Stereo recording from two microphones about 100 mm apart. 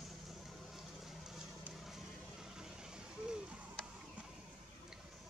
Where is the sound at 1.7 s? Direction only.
Centre (ahead or behind).